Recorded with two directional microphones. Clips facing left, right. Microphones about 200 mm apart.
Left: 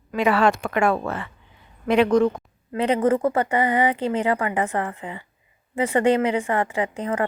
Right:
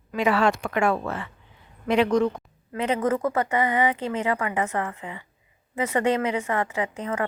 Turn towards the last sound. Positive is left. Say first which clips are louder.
# left 3 dB
turn(degrees=35)  # may be behind; listen again after turning